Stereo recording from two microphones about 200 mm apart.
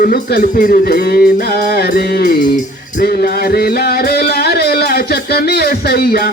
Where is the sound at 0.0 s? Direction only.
50° left (ahead or behind).